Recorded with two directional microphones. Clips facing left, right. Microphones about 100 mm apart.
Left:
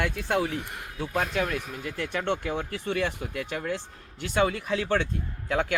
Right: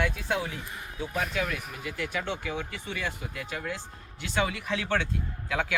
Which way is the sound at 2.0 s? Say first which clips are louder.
Left 4 dB; 50° left (ahead or behind).